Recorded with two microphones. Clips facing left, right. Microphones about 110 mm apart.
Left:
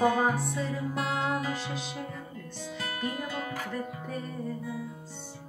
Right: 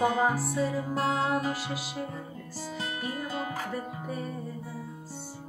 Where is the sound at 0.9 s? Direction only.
40° right (ahead or behind).